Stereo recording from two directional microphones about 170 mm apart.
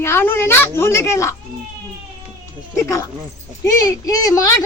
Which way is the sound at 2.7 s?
15° left (ahead or behind).